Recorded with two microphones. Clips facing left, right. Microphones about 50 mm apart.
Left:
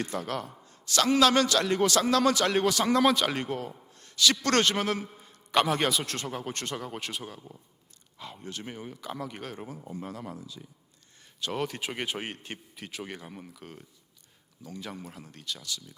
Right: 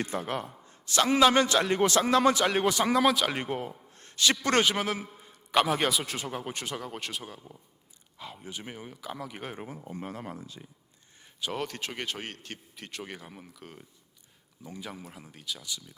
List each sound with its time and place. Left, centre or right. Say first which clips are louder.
0.0 s a man's voice: even; right
2.9 s a man's voice: left 2 dB; centre
3.3 s a man's voice: even; right
3.9 s a sound: left 1 dB; right
4.4 s a man's voice: even; centre
9.4 s a man's voice: even; centre
9.9 s speech: even; right
11.3 s speech: left 1 dB; centre
11.6 s speech: left 2 dB; centre
12.7 s a man's voice: even; centre
14.6 s speech: left 1 dB; centre
14.8 s a man's voice: left 1 dB; centre